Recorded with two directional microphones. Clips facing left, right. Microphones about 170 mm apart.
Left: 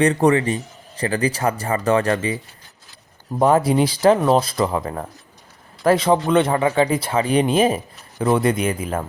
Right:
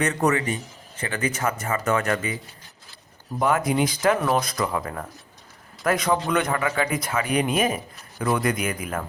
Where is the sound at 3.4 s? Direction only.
30° left (ahead or behind).